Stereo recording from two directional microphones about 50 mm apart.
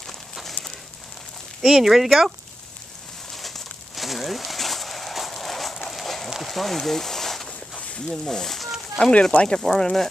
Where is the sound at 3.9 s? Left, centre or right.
Centre.